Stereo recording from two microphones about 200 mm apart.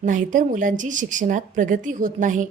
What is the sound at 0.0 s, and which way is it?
A woman's voice, 40° right (ahead or behind).